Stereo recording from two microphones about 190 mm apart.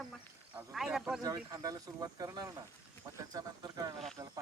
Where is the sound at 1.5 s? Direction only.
20° right (ahead or behind).